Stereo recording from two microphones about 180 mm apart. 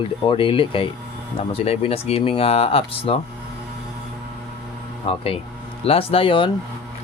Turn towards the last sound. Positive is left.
turn(degrees=30)  # may be behind; listen again after turning